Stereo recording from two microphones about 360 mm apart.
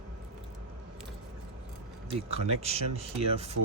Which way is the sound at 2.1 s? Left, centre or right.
Centre.